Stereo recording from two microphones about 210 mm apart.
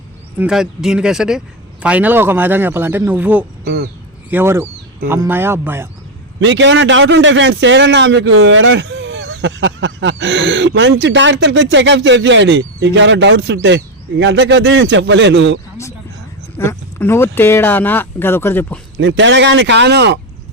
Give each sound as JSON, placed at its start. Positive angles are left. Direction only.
{"t": 0.3, "sound": "speech", "side_deg": -5}
{"t": 3.6, "sound": "speech", "side_deg": -50}
{"t": 4.3, "sound": "speech", "side_deg": -10}
{"t": 6.4, "sound": "speech", "side_deg": -60}
{"t": 16.6, "sound": "speech", "side_deg": 10}
{"t": 18.9, "sound": "speech", "side_deg": -60}